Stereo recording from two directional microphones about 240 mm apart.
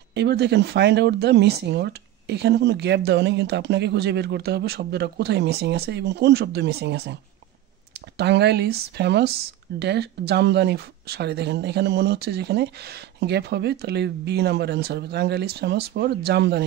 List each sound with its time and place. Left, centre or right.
0.1 s speech: right
8.2 s speech: right